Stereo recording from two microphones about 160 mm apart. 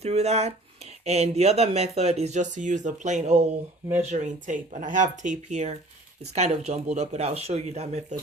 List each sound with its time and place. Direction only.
0.0 s speech: 40° right (ahead or behind)